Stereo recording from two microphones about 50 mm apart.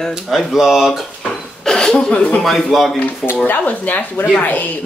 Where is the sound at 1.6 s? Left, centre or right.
Centre.